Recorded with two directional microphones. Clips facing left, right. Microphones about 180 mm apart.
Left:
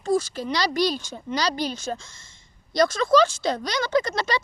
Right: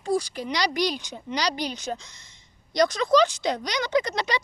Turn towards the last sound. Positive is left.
turn(degrees=-15)  # may be behind; listen again after turning